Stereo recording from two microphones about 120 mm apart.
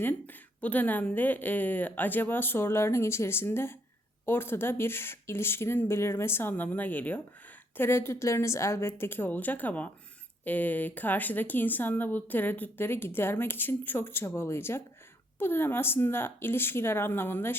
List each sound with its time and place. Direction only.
0.0 s speech: 15° left (ahead or behind)